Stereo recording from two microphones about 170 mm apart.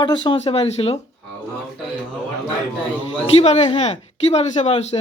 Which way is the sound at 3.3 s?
40° left (ahead or behind).